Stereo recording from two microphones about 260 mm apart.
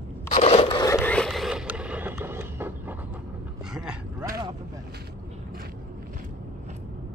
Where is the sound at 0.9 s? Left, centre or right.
Centre.